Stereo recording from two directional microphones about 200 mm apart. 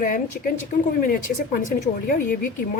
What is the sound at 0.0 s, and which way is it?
Speech, 45° left (ahead or behind).